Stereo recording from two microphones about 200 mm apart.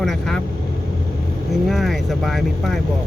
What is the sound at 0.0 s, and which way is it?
Vehicle, centre (ahead or behind).